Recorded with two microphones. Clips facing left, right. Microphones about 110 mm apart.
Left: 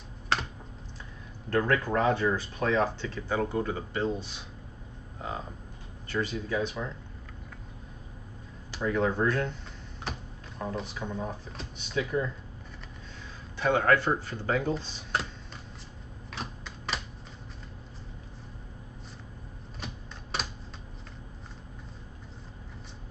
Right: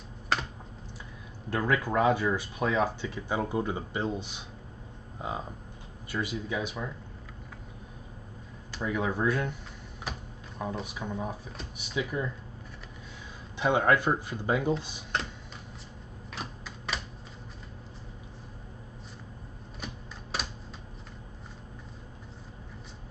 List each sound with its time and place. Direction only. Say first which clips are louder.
1.5 s speech: left 2 dB; 10° right (ahead or behind)
8.8 s speech: left 2 dB; 10° right (ahead or behind)
10.1 s a sound: left 1 dB; centre (ahead or behind)
10.7 s speech: left 2 dB; 10° right (ahead or behind)
13.6 s speech: even; 15° right (ahead or behind)
16.3 s typewriter: left 1 dB; centre (ahead or behind)
19.8 s typewriter: even; centre (ahead or behind)